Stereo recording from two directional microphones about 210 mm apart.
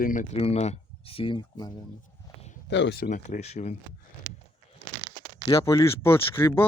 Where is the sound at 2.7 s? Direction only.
55° left (ahead or behind).